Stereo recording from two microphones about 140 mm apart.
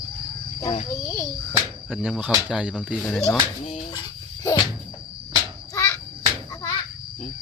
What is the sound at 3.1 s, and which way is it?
Speech, 5° left (ahead or behind).